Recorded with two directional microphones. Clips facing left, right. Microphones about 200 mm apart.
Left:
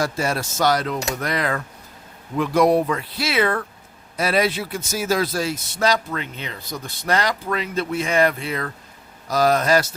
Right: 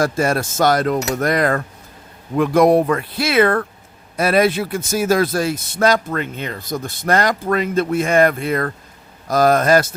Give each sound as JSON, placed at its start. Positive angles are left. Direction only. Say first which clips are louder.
{"t": 0.0, "sound": "speech", "louder": "right 5 dB", "side_deg": -50}